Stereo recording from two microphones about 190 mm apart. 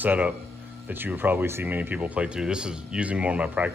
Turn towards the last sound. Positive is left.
turn(degrees=-10)  # may be behind; listen again after turning